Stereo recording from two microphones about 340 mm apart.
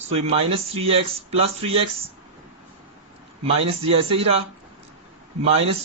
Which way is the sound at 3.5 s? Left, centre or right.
Centre.